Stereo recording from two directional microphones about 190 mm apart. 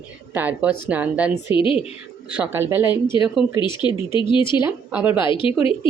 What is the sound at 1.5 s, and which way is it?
Speech, 30° left (ahead or behind).